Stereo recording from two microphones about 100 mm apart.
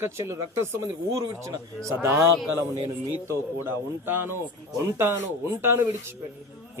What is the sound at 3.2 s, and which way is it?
Speech, 25° right (ahead or behind).